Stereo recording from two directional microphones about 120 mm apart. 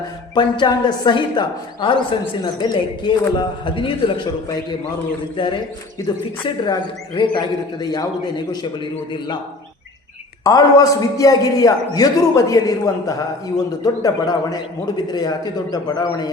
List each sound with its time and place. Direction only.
0.3 s a man's voice: 40° left (ahead or behind)
6.0 s a man's voice: 30° left (ahead or behind)
6.4 s a man's voice: 40° left (ahead or behind)
10.4 s a man's voice: 30° left (ahead or behind)